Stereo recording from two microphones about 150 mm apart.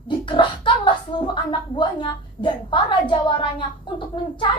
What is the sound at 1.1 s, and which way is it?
A woman's voice, 30° left (ahead or behind).